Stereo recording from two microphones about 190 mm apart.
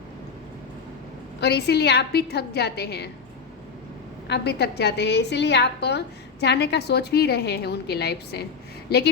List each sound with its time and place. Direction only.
1.4 s a woman's voice: 60° left (ahead or behind)
4.3 s a woman's voice: 60° left (ahead or behind)